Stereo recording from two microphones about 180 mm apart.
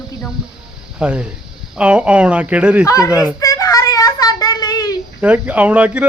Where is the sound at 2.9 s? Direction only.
20° left (ahead or behind).